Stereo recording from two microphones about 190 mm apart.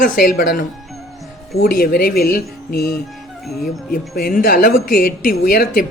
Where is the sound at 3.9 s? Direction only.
50° left (ahead or behind).